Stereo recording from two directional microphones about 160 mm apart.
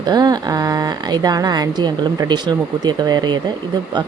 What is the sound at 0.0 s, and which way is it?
Speech, 25° right (ahead or behind).